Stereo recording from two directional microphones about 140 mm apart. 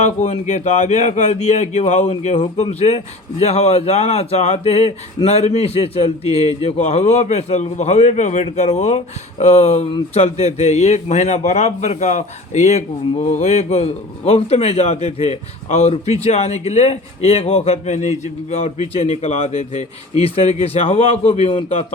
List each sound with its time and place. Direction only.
0.0 s a man's voice: 55° left (ahead or behind)